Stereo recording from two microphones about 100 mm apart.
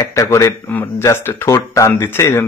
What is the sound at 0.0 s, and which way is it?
Speech, 30° left (ahead or behind).